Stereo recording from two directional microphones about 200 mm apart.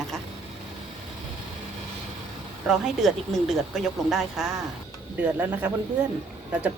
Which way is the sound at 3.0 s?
Centre (ahead or behind).